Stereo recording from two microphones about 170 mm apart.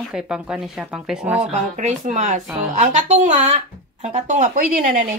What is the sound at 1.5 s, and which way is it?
Speech, 45° right (ahead or behind).